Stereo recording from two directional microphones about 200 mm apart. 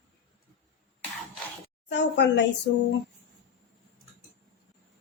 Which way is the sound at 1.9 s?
60° left (ahead or behind).